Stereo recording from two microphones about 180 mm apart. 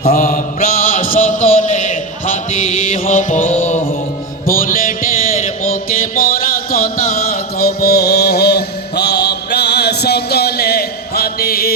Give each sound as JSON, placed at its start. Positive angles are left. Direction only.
{"t": 0.1, "sound": "mantra", "side_deg": 40}
{"t": 4.4, "sound": "music", "side_deg": 50}
{"t": 6.1, "sound": "a sound", "side_deg": 55}
{"t": 7.6, "sound": "mantra", "side_deg": 60}